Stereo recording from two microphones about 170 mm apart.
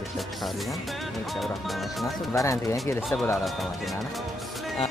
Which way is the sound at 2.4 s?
15° left (ahead or behind).